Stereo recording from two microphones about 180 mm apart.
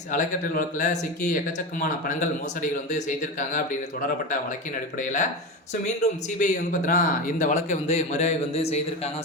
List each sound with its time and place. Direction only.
0.1 s speech: 45° left (ahead or behind)
2.6 s speech: 45° left (ahead or behind)
4.9 s speech: 45° left (ahead or behind)